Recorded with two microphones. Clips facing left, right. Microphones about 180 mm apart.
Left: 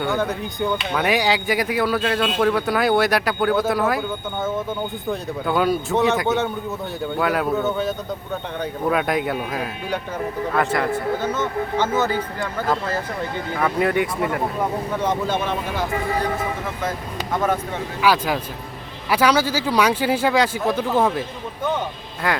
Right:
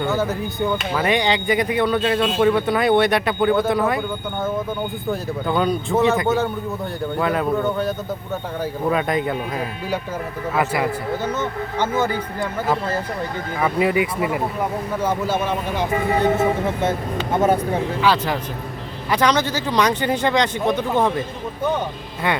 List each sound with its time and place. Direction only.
0.0 s a man's voice: 5° right (ahead or behind)
5.5 s a man's voice: 5° left (ahead or behind)
13.6 s a man's voice: 5° right (ahead or behind)
15.7 s speech: 25° right (ahead or behind)
18.0 s speech: 10° left (ahead or behind)